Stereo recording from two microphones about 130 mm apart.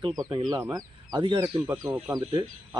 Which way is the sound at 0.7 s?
30° right (ahead or behind).